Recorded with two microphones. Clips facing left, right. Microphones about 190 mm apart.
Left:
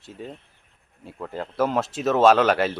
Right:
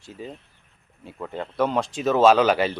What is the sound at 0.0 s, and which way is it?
Speech, centre (ahead or behind).